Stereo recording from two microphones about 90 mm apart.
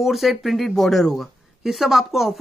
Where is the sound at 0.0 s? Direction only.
Centre (ahead or behind).